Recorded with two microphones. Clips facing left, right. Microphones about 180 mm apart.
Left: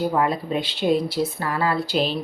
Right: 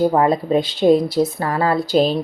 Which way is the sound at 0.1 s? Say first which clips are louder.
Right 6 dB; 40° right (ahead or behind).